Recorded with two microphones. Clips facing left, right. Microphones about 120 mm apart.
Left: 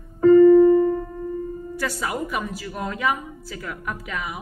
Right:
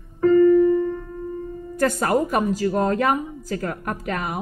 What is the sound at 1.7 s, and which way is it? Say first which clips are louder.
A woman's voice: right 8 dB; 45° right (ahead or behind).